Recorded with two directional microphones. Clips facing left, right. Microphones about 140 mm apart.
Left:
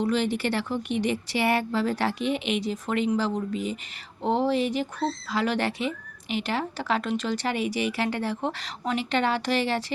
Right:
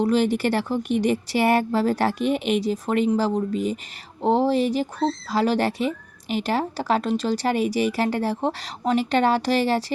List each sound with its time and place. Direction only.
0.0 s speech: 40° right (ahead or behind)